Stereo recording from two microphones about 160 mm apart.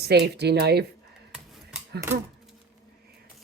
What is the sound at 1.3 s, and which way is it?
Scissors, centre (ahead or behind).